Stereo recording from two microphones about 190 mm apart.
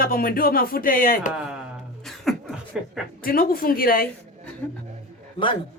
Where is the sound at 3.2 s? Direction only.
50° left (ahead or behind).